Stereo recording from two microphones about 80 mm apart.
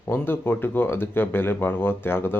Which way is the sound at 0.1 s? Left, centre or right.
Left.